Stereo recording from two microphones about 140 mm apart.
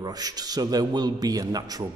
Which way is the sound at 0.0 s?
30° right (ahead or behind).